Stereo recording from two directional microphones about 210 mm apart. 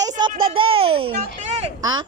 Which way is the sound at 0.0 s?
20° right (ahead or behind).